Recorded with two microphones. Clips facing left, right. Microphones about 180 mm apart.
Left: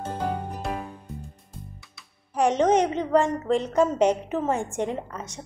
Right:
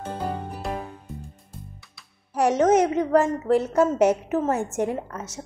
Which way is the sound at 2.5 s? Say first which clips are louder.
Right 4 dB; 5° right (ahead or behind).